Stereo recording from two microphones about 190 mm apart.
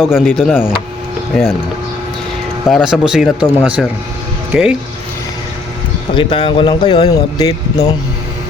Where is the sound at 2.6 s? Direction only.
Centre (ahead or behind).